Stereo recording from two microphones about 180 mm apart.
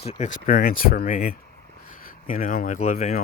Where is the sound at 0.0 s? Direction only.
35° left (ahead or behind).